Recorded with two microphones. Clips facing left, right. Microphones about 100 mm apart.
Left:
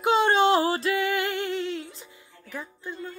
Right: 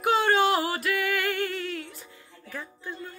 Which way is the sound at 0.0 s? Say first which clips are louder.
Left 2 dB; 20° left (ahead or behind).